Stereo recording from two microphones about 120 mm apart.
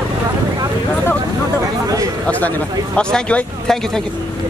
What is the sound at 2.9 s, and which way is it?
Speech, 5° left (ahead or behind).